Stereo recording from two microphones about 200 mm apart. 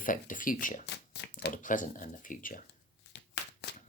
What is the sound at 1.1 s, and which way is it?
Speech, 55° left (ahead or behind).